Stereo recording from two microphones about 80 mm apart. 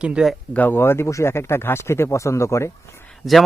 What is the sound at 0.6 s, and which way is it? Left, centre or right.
Speech, left.